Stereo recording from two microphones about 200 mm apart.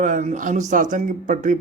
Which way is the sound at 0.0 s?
40° right (ahead or behind).